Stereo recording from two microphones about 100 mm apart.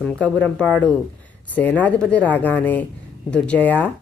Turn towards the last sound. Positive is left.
turn(degrees=15)  # may be behind; listen again after turning